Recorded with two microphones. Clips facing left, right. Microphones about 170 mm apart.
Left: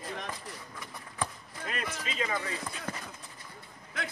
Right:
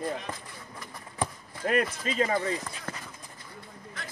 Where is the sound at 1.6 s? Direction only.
50° right (ahead or behind).